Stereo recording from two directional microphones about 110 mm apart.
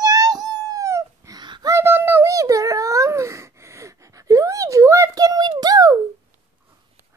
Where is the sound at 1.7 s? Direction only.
20° right (ahead or behind).